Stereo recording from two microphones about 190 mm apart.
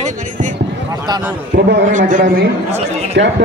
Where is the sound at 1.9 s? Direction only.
45° right (ahead or behind).